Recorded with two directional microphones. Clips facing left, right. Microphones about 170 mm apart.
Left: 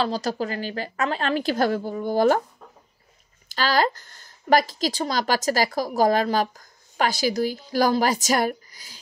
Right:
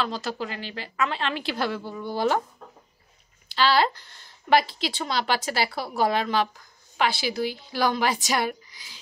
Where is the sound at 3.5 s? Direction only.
45° left (ahead or behind).